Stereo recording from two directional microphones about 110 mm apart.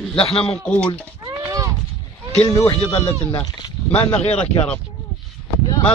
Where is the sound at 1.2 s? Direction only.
30° right (ahead or behind).